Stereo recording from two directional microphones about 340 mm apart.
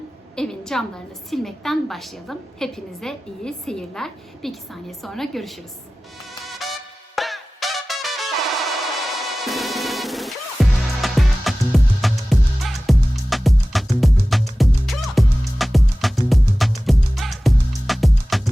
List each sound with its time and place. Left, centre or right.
0.3 s a woman's voice: centre
6.4 s music: centre